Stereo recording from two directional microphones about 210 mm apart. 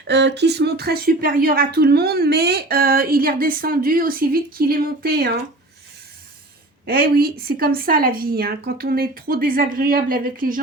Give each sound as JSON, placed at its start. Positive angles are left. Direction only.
{"t": 0.1, "sound": "speech", "side_deg": -55}
{"t": 6.8, "sound": "speech", "side_deg": -45}